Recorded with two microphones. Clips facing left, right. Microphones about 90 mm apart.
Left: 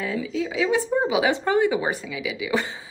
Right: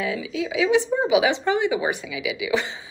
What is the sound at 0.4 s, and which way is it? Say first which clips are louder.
A woman's voice: right 3 dB; 40° left (ahead or behind).